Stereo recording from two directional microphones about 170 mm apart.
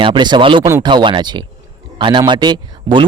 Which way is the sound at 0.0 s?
25° right (ahead or behind).